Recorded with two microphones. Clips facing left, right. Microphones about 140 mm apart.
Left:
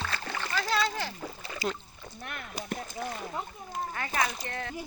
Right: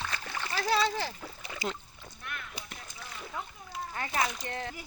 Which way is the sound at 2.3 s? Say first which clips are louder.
Left 6 dB; 45° left (ahead or behind).